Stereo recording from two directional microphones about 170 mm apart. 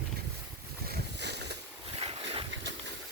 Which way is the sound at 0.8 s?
70° right (ahead or behind).